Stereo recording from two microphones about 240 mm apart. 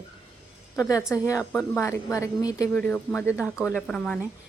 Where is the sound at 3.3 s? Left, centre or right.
Centre.